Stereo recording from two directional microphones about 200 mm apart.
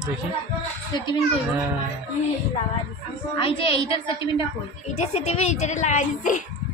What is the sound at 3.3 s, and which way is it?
A woman's voice, 25° left (ahead or behind).